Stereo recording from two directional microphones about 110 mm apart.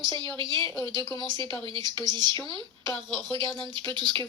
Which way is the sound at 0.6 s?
30° left (ahead or behind).